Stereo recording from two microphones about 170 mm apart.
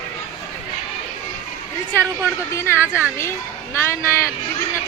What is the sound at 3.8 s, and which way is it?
Speech, 15° left (ahead or behind).